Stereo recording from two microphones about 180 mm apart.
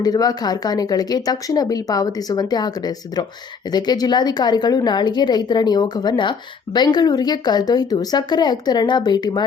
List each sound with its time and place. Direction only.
0.0 s speech: 20° left (ahead or behind)